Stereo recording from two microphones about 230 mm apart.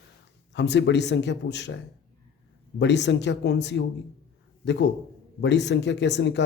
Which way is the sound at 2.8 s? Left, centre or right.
Left.